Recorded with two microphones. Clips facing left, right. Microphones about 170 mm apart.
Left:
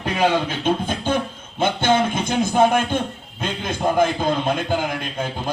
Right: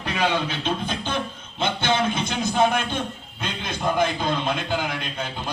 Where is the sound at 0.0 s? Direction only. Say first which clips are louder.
Left 4 dB; 45° left (ahead or behind).